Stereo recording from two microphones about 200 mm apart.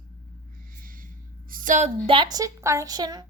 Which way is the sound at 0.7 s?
45° right (ahead or behind).